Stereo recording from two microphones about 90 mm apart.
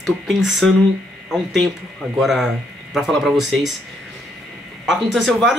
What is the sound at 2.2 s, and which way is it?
Speech, 5° right (ahead or behind).